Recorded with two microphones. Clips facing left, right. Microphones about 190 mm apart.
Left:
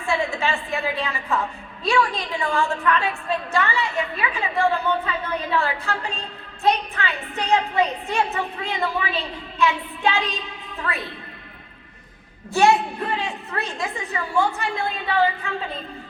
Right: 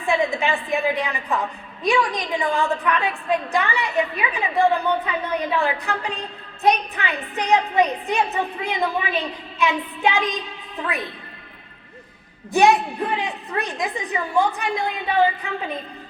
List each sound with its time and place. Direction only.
0.0 s a woman's voice: 15° right (ahead or behind)
12.5 s a woman's voice: 15° right (ahead or behind)